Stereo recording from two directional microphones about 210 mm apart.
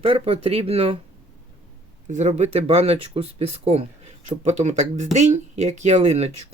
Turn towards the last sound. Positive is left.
turn(degrees=-30)  # may be behind; listen again after turning